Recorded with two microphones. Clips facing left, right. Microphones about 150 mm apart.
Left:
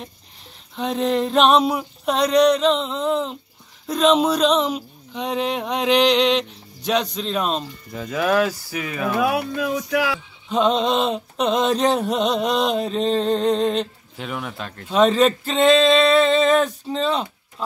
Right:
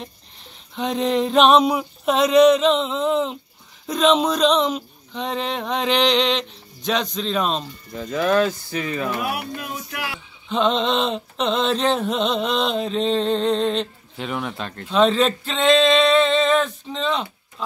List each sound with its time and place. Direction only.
0.7 s a sound: centre (ahead or behind)
3.8 s speech: centre (ahead or behind)
9.9 s speech: 90° left
10.5 s speech: 10° left (ahead or behind)
15.7 s music: 40° left (ahead or behind)
16.0 s speech: 5° left (ahead or behind)